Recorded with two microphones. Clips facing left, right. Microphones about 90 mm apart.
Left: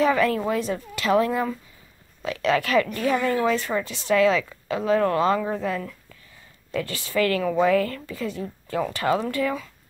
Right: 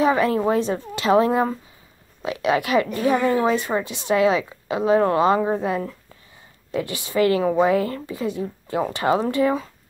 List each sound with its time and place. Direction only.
0.0 s a woman's voice: 20° right (ahead or behind)